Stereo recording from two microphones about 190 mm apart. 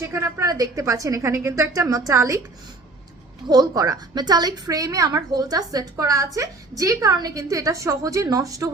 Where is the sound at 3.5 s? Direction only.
20° right (ahead or behind).